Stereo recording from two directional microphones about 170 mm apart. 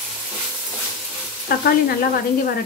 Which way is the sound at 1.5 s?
60° left (ahead or behind).